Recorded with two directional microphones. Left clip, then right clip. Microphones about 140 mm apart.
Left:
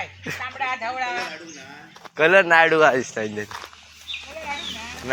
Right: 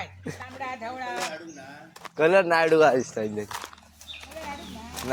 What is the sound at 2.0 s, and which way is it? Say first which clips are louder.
Speech: left 4 dB; centre (ahead or behind).